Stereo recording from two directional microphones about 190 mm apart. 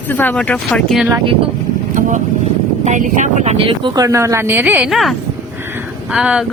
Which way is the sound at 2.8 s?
40° right (ahead or behind).